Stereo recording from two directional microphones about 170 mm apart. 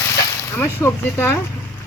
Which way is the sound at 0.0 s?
15° left (ahead or behind).